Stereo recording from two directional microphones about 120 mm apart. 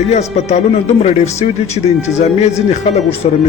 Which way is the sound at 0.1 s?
65° left (ahead or behind).